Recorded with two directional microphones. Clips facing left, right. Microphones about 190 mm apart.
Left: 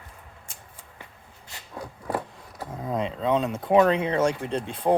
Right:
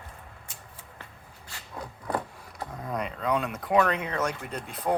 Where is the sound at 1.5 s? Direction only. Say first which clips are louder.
Left 1 dB; 20° left (ahead or behind).